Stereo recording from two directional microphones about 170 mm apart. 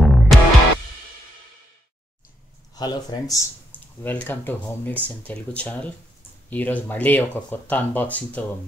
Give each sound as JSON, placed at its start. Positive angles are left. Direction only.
{"t": 0.0, "sound": "music", "side_deg": 0}
{"t": 2.7, "sound": "speech", "side_deg": 25}
{"t": 4.0, "sound": "speech", "side_deg": 10}